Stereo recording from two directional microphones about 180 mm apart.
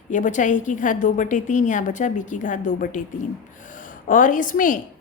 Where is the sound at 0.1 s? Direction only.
45° left (ahead or behind).